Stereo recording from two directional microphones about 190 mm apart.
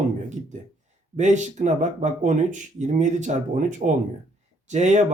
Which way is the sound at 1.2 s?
40° right (ahead or behind).